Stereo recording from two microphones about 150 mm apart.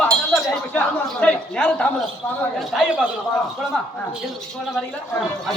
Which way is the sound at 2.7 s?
5° right (ahead or behind).